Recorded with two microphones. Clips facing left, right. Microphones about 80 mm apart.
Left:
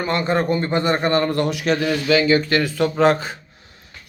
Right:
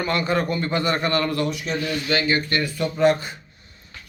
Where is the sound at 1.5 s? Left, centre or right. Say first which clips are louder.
Left 6 dB; left.